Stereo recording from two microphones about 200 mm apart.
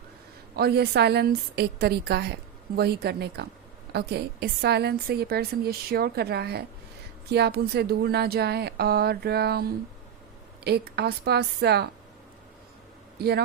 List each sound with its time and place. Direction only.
0.5 s a woman's voice: 55° right (ahead or behind)
13.1 s a man's voice: 55° right (ahead or behind)